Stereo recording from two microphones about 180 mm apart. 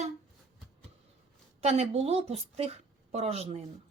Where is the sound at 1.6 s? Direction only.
35° right (ahead or behind).